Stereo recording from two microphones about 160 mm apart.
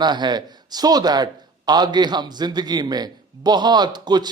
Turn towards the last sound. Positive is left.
turn(degrees=-25)  # may be behind; listen again after turning